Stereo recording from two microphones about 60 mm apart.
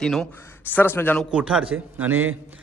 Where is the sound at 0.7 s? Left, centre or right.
Left.